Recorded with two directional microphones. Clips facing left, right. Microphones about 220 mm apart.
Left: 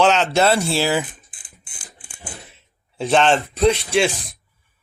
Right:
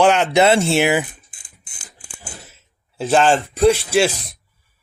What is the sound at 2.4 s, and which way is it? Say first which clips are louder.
Speech: even; centre (ahead or behind).